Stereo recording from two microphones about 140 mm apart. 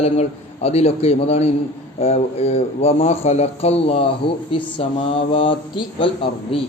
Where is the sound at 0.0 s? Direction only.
50° left (ahead or behind).